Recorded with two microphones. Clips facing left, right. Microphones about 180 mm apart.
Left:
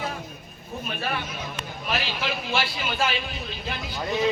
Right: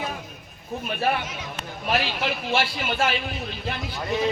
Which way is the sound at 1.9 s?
55° right (ahead or behind).